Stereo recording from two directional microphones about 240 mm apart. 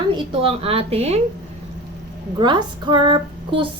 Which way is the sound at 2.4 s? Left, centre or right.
Centre.